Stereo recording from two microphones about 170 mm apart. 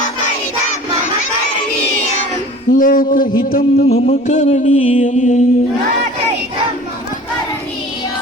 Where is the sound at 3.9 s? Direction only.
40° left (ahead or behind).